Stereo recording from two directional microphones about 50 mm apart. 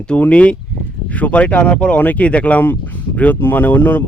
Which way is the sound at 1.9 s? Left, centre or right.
Left.